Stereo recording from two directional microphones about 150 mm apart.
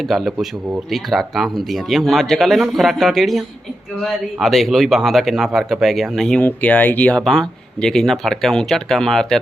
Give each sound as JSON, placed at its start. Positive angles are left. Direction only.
{"t": 0.1, "sound": "speech", "side_deg": 0}